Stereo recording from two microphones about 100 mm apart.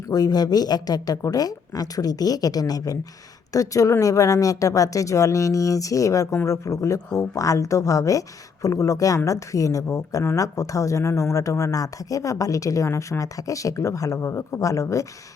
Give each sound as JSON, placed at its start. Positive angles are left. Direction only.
{"t": 0.1, "sound": "a woman's voice", "side_deg": 40}